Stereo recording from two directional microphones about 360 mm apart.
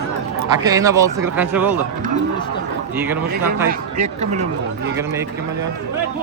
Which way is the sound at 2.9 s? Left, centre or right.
Centre.